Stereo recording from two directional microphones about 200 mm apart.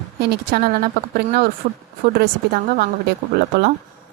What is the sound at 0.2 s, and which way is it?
Speech, 50° right (ahead or behind).